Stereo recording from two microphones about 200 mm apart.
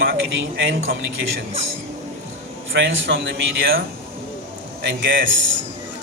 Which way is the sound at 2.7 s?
60° right (ahead or behind).